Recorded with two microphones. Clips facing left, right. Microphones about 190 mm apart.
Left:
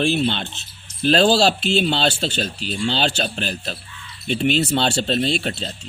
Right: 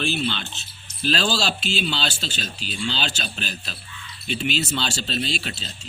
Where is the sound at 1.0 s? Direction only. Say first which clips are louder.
Left 8 dB; 55° left (ahead or behind).